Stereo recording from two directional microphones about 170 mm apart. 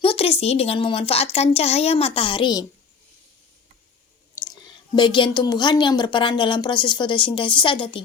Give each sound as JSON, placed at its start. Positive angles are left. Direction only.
{"t": 0.0, "sound": "a woman's voice", "side_deg": 35}
{"t": 4.9, "sound": "a woman's voice", "side_deg": 30}